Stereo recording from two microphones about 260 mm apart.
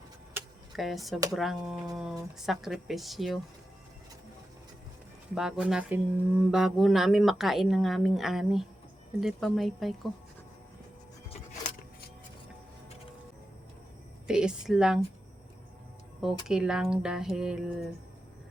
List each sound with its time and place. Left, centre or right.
0.3 s a sound: centre
1.4 s speech: centre
5.3 s speech: centre
11.3 s vehicle: left
14.3 s speech: centre
16.2 s speech: centre